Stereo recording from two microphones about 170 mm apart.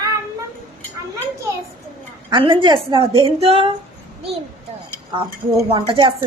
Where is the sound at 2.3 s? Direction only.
30° right (ahead or behind).